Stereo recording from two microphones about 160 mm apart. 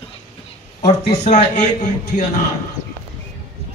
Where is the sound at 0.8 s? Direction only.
45° left (ahead or behind).